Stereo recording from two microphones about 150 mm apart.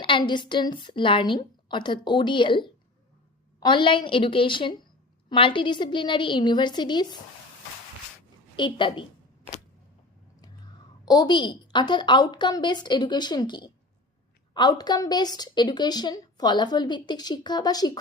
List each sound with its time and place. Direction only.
0.0 s a woman's voice: 30° left (ahead or behind)
8.5 s a woman's voice: 30° left (ahead or behind)
11.0 s a woman's voice: 25° left (ahead or behind)